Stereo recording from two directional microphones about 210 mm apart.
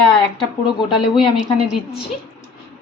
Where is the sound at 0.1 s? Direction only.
25° left (ahead or behind).